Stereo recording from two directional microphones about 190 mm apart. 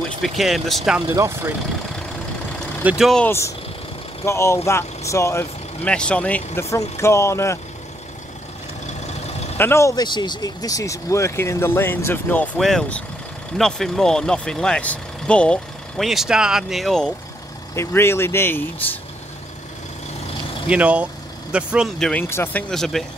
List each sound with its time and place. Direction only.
0.2 s speech: centre (ahead or behind)
1.0 s speech: 15° right (ahead or behind)
2.8 s speech: 5° right (ahead or behind)
3.3 s speech: 15° left (ahead or behind)
9.0 s vehicle: 35° left (ahead or behind)
9.6 s speech: 15° left (ahead or behind)
17.7 s speech: 15° left (ahead or behind)
20.6 s speech: 5° right (ahead or behind)